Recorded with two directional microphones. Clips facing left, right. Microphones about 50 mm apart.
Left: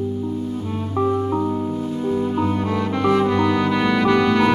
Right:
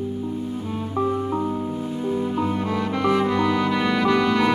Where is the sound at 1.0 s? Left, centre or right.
Left.